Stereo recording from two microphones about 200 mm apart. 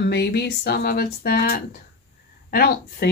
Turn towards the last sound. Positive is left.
turn(degrees=50)  # may be behind; listen again after turning